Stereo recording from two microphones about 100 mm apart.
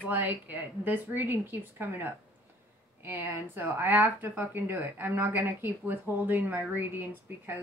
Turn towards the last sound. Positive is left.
turn(degrees=-20)  # may be behind; listen again after turning